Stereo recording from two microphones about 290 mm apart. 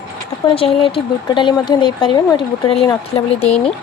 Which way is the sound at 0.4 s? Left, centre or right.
Centre.